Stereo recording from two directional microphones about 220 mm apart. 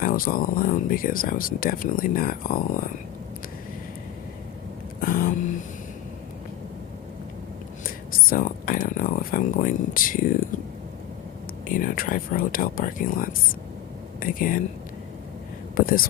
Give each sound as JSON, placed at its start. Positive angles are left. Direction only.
{"t": 0.0, "sound": "speech", "side_deg": 40}
{"t": 5.0, "sound": "speech", "side_deg": 40}
{"t": 7.9, "sound": "speech", "side_deg": 40}
{"t": 11.7, "sound": "speech", "side_deg": 40}
{"t": 15.7, "sound": "speech", "side_deg": 40}